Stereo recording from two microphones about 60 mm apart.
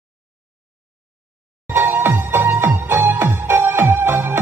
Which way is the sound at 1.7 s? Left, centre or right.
Right.